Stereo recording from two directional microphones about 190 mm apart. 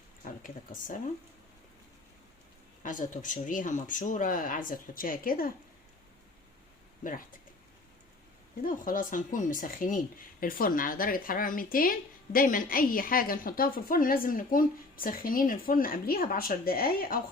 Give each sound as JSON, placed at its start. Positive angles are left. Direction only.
{"t": 0.4, "sound": "speech", "side_deg": 45}
{"t": 2.8, "sound": "speech", "side_deg": 45}
{"t": 7.0, "sound": "speech", "side_deg": 45}
{"t": 8.6, "sound": "speech", "side_deg": 45}